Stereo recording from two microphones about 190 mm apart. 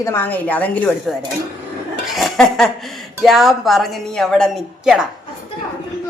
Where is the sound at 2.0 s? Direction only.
Centre (ahead or behind).